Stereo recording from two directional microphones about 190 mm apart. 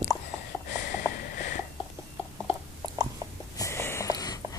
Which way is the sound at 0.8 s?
45° left (ahead or behind).